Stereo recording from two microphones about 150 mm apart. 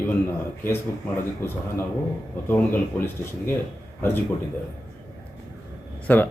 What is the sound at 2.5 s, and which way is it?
Speech, 15° left (ahead or behind).